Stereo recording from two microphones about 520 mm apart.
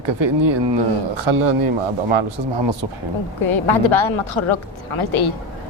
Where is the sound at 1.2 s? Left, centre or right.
Right.